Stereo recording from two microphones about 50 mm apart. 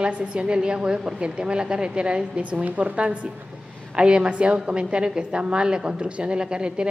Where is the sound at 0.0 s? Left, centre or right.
Right.